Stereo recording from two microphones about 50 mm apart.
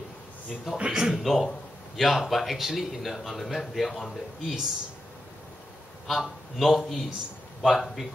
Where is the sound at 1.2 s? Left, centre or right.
Centre.